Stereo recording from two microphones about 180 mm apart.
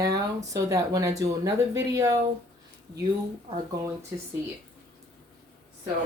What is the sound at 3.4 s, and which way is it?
Speech, 20° right (ahead or behind).